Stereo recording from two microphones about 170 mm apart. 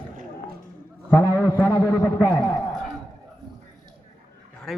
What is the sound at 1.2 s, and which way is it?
A man's voice, 15° left (ahead or behind).